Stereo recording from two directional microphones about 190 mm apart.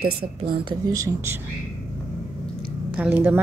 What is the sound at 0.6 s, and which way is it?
Speech, 20° right (ahead or behind).